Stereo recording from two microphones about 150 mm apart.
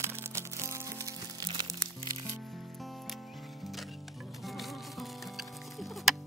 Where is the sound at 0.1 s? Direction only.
20° right (ahead or behind).